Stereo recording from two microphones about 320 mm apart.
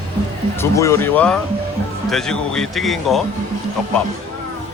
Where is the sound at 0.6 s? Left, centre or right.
Centre.